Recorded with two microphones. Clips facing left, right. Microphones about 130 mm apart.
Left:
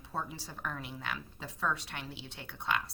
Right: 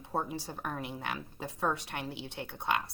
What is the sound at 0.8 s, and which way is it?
Speech, 55° right (ahead or behind).